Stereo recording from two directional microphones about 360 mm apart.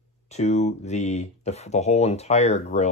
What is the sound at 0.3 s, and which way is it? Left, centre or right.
Speech, centre.